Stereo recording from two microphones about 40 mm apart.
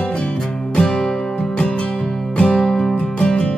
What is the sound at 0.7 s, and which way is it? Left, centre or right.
Music, centre.